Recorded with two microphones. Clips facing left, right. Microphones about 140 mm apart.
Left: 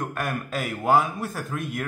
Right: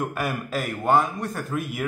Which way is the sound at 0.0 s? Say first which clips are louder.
Right 2 dB; 5° right (ahead or behind).